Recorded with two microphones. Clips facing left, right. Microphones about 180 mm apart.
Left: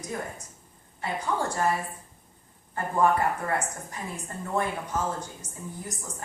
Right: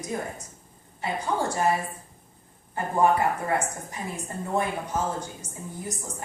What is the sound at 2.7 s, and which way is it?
Speech, 20° right (ahead or behind).